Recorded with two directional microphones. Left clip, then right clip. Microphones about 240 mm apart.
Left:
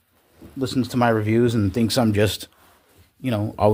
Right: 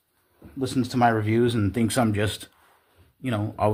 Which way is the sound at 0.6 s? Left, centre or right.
Left.